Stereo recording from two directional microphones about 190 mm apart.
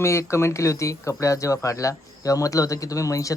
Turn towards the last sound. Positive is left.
turn(degrees=15)  # may be behind; listen again after turning